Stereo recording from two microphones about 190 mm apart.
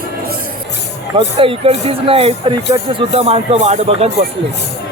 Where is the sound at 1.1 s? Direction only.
30° right (ahead or behind).